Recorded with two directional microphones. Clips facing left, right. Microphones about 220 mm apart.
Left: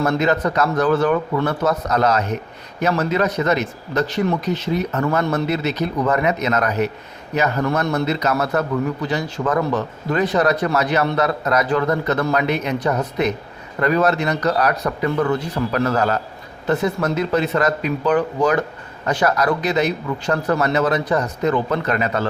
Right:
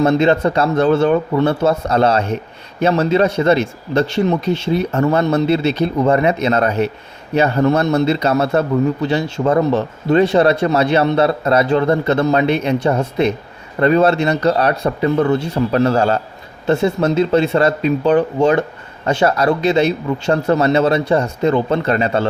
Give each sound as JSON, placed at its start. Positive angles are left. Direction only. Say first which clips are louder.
{"t": 0.0, "sound": "a man's voice", "louder": "right 5 dB", "side_deg": -25}